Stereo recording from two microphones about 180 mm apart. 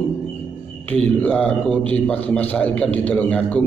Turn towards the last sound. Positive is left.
turn(degrees=5)  # may be behind; listen again after turning